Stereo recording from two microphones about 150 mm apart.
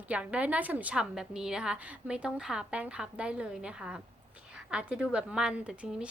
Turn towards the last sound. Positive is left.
turn(degrees=-5)  # may be behind; listen again after turning